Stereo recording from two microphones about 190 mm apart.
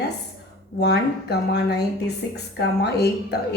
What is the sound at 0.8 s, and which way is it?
Speech, 60° left (ahead or behind).